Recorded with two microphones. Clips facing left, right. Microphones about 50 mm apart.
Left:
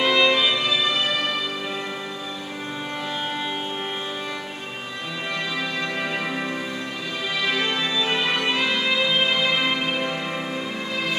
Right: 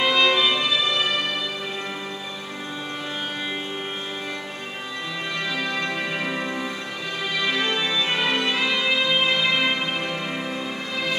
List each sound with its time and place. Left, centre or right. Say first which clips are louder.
0.0 s music: even; centre
5.6 s music: even; centre
7.4 s music: even; centre